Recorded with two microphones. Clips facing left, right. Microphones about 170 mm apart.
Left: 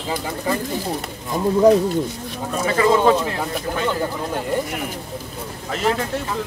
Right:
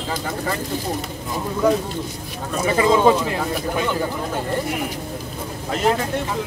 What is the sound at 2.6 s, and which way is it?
Speech, 15° right (ahead or behind).